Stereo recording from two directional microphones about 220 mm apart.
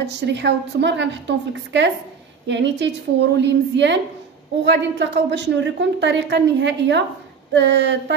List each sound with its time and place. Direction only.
0.0 s a woman's voice: 50° right (ahead or behind)